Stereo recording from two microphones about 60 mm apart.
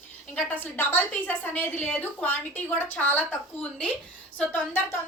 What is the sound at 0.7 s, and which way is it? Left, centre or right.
A woman's voice, left.